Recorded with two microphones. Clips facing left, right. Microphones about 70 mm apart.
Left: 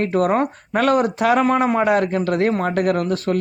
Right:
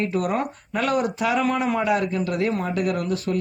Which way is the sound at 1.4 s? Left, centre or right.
Left.